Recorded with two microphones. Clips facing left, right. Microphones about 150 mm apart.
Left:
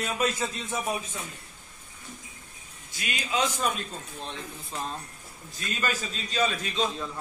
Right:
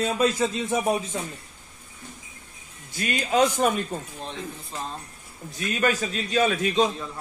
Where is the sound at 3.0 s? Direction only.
45° right (ahead or behind).